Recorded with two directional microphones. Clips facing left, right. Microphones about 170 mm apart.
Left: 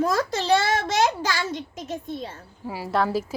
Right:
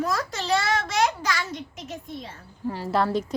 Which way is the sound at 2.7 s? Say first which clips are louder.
Even; 10° left (ahead or behind).